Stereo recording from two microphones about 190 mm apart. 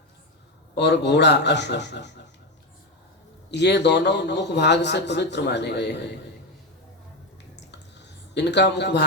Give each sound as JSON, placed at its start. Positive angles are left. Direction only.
{"t": 0.8, "sound": "a man's voice", "side_deg": 65}
{"t": 3.5, "sound": "a man's voice", "side_deg": 65}
{"t": 8.4, "sound": "a man's voice", "side_deg": 65}